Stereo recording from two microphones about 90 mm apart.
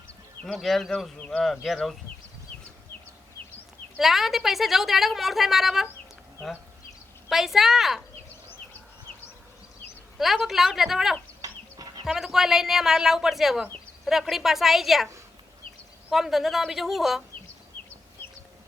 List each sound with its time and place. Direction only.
0.4 s speech: centre (ahead or behind)
3.9 s speech: 5° right (ahead or behind)
7.3 s speech: 5° right (ahead or behind)
10.2 s speech: centre (ahead or behind)
11.4 s chicken: 45° right (ahead or behind)
12.0 s speech: 5° right (ahead or behind)